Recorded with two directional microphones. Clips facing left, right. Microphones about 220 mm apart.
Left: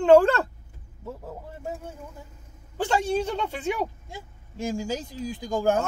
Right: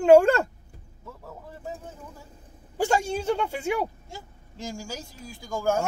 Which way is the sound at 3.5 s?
10° right (ahead or behind).